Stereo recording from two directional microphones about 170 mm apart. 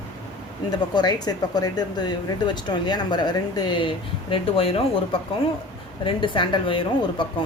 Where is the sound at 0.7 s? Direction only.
25° left (ahead or behind).